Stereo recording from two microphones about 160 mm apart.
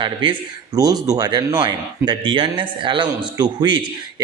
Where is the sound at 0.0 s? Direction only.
30° right (ahead or behind).